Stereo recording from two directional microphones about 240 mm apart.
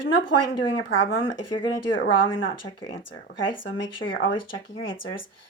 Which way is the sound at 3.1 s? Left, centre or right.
Left.